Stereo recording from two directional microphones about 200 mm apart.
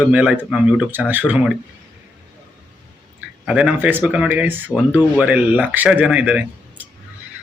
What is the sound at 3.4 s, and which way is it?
Speech, 5° right (ahead or behind).